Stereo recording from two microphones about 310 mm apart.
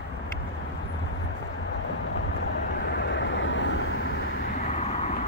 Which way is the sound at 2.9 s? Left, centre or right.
Left.